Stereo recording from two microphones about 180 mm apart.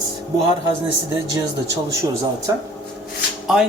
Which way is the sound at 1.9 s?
20° right (ahead or behind).